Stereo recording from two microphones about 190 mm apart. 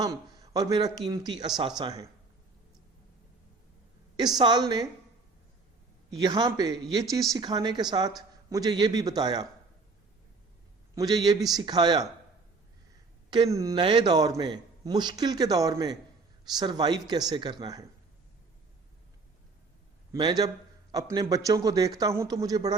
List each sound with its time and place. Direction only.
0.0 s a man's voice: 20° right (ahead or behind)
4.4 s a man's voice: 25° right (ahead or behind)
6.1 s a man's voice: 20° right (ahead or behind)
10.9 s a man's voice: 20° right (ahead or behind)
13.3 s a man's voice: 20° right (ahead or behind)
20.1 s a man's voice: 20° right (ahead or behind)